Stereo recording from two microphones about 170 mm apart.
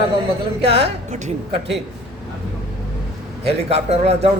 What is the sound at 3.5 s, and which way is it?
Speech, 35° right (ahead or behind).